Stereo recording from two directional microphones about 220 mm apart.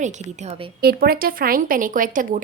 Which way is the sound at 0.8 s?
45° right (ahead or behind).